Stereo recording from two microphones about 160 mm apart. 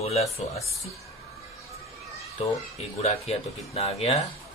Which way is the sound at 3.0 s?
40° left (ahead or behind).